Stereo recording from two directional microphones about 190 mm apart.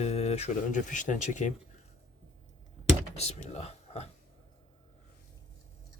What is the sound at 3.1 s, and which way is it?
Speech, 35° left (ahead or behind).